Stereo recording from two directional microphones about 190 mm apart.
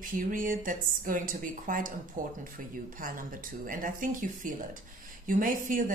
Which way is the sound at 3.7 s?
45° right (ahead or behind).